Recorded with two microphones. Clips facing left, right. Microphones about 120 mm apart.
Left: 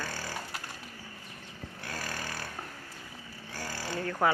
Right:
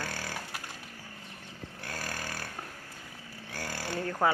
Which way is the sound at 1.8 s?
50° right (ahead or behind).